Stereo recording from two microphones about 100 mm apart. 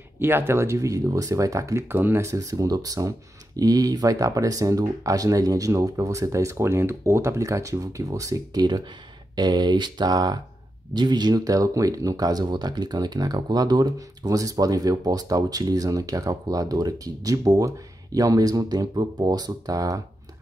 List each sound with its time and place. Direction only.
0.2 s speech: 25° right (ahead or behind)
9.3 s speech: 45° right (ahead or behind)